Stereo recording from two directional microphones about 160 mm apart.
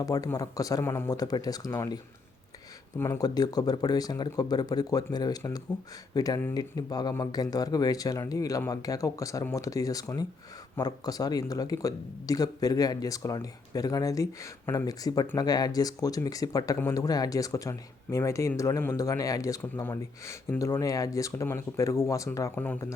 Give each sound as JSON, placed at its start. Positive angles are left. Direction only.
{"t": 0.0, "sound": "speech", "side_deg": 20}
{"t": 3.0, "sound": "speech", "side_deg": 20}